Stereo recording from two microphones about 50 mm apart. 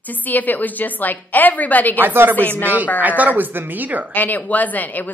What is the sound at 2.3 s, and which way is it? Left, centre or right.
Speech, left.